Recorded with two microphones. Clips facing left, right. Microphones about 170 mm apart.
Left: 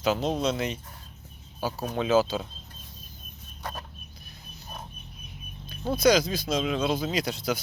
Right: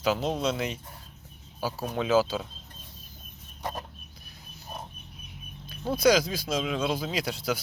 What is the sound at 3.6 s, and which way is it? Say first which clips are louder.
Chicken: right 3 dB; 20° right (ahead or behind).